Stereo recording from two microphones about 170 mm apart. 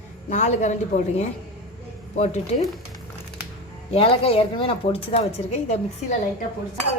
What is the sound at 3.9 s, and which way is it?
A woman's voice, 35° left (ahead or behind).